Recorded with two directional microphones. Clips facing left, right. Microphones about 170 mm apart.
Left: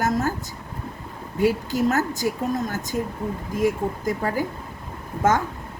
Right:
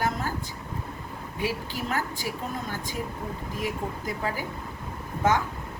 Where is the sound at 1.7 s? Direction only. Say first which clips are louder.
Left 9 dB; 45° left (ahead or behind).